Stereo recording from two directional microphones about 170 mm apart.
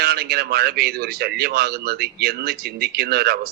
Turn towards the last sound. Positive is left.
turn(degrees=-65)  # may be behind; listen again after turning